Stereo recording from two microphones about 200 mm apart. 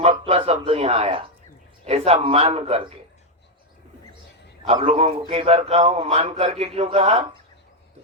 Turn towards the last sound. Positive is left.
turn(degrees=-30)  # may be behind; listen again after turning